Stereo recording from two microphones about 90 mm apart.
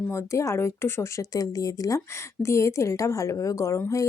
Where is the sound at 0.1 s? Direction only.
30° left (ahead or behind).